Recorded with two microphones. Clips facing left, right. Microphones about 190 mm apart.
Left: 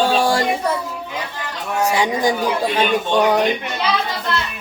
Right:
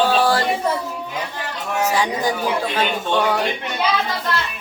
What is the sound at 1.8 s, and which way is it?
Speech, 15° left (ahead or behind).